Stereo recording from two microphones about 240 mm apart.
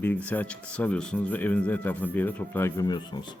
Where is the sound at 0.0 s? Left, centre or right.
Centre.